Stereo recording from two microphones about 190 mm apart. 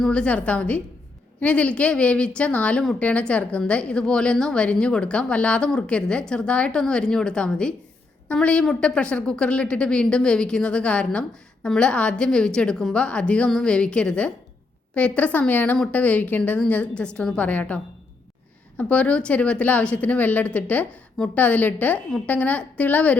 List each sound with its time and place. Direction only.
0.0 s a woman's voice: 5° left (ahead or behind)
18.8 s speech: 5° left (ahead or behind)